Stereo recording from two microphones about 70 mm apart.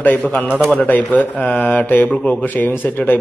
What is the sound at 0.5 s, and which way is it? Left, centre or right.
Speech, centre.